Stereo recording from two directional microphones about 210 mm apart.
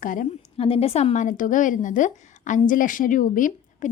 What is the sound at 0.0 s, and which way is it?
A woman's voice, 40° left (ahead or behind).